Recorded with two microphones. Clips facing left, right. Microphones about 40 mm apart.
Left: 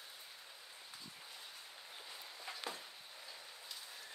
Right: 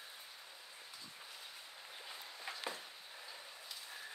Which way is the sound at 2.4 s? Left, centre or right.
Centre.